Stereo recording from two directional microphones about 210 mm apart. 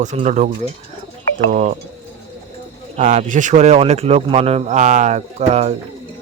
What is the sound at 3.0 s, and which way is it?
Speech, 35° right (ahead or behind).